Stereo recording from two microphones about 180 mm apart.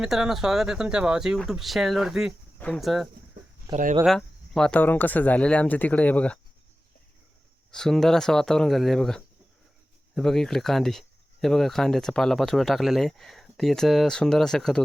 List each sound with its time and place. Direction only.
0.0 s speech: 5° right (ahead or behind)
3.7 s speech: 20° right (ahead or behind)
4.0 s speech: 5° left (ahead or behind)
7.7 s speech: centre (ahead or behind)